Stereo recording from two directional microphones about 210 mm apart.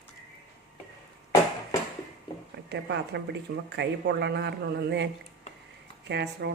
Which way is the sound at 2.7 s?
55° right (ahead or behind).